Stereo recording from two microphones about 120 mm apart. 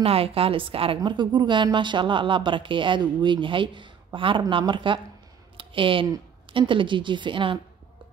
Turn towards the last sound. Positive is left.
turn(degrees=-45)  # may be behind; listen again after turning